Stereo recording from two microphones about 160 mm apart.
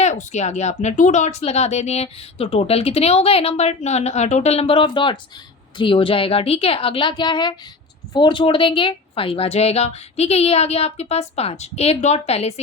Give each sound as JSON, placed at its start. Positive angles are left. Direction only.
{"t": 0.0, "sound": "a woman's voice", "side_deg": 50}